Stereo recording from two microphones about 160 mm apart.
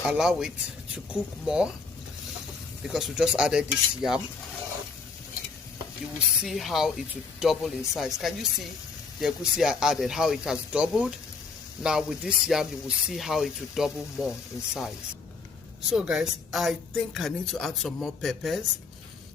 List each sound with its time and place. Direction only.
0.1 s speech: 5° right (ahead or behind)
2.8 s speech: 5° right (ahead or behind)
6.1 s speech: 5° right (ahead or behind)
15.9 s speech: 5° right (ahead or behind)